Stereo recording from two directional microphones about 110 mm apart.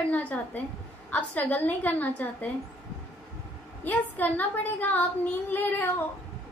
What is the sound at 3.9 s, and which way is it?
A woman's voice, 15° left (ahead or behind).